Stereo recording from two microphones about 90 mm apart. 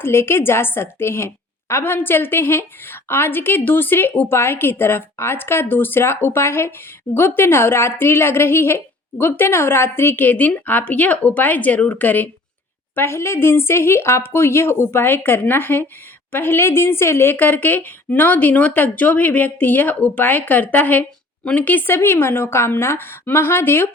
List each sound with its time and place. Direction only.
0.0 s a woman's voice: 25° left (ahead or behind)